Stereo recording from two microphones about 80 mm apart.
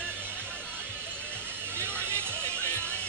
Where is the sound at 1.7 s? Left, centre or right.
Right.